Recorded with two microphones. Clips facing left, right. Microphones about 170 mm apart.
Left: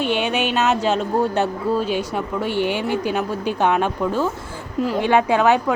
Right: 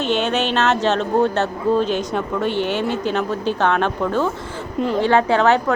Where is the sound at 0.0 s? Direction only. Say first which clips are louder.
Right 1 dB; 10° left (ahead or behind).